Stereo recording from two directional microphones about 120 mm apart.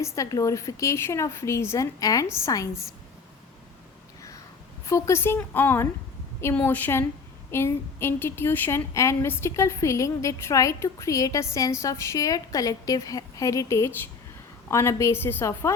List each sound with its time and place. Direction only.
0.0 s a woman's voice: 30° left (ahead or behind)
4.9 s a woman's voice: 25° left (ahead or behind)